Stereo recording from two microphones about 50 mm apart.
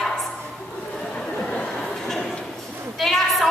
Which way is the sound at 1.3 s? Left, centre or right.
Centre.